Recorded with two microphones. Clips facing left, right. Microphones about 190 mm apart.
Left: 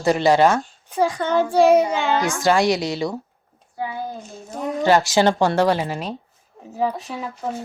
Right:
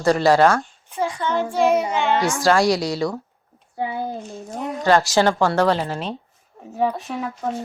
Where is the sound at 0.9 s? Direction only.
35° left (ahead or behind).